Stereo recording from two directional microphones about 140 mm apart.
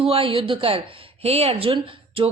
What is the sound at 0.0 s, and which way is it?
Speech, 40° right (ahead or behind).